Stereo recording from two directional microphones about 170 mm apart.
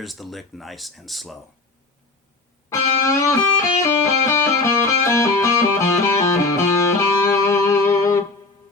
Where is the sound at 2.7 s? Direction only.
15° left (ahead or behind).